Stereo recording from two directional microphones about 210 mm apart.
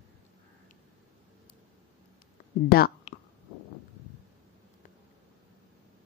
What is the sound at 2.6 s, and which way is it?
Speech, 45° left (ahead or behind).